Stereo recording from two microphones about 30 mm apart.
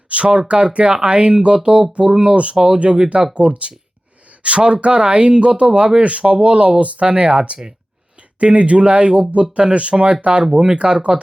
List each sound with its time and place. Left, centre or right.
0.1 s speech: right
6.2 s speech: right